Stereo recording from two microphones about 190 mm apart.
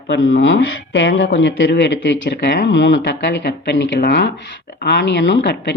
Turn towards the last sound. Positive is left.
turn(degrees=60)  # may be behind; listen again after turning